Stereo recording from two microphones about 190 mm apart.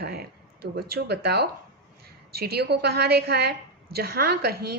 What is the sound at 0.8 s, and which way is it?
A woman's voice, 55° right (ahead or behind).